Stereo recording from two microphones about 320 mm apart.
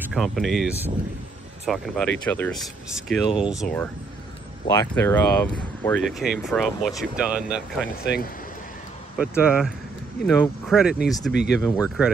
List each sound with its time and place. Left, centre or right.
0.0 s speech: centre
8.0 s speech: left
9.2 s speech: centre
11.3 s speech: left
11.6 s speech: centre